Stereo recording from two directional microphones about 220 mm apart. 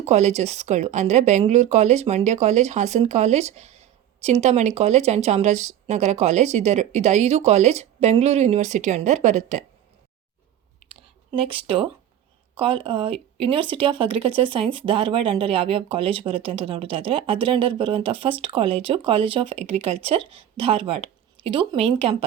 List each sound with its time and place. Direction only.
0.0 s a woman's voice: 30° right (ahead or behind)
10.8 s a sound: 25° right (ahead or behind)
12.5 s speech: 25° right (ahead or behind)